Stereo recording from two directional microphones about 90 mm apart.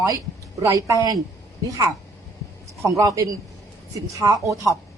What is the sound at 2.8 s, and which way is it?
Speech, 35° right (ahead or behind).